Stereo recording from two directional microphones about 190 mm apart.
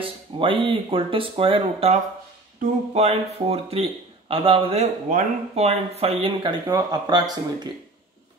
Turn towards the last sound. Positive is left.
turn(degrees=-20)  # may be behind; listen again after turning